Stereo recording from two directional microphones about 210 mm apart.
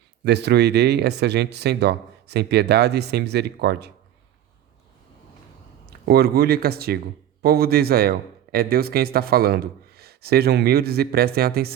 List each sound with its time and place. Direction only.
0.3 s speech: 50° right (ahead or behind)
5.8 s speech: 45° right (ahead or behind)